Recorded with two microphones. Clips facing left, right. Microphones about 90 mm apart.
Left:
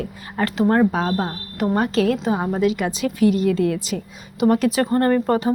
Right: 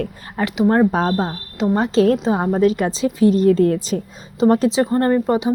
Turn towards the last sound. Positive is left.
turn(degrees=-15)  # may be behind; listen again after turning